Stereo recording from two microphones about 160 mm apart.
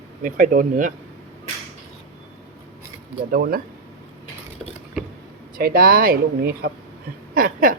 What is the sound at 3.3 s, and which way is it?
Speech, 65° right (ahead or behind).